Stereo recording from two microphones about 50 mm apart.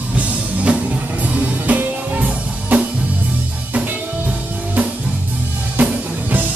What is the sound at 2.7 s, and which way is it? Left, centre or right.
Drum kit, right.